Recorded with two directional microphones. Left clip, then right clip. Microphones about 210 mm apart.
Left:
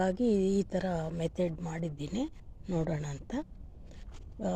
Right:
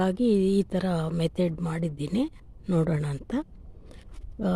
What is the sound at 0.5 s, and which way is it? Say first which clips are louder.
Speech: right 5 dB; 25° right (ahead or behind).